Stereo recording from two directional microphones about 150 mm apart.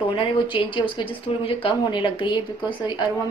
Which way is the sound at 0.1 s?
35° left (ahead or behind).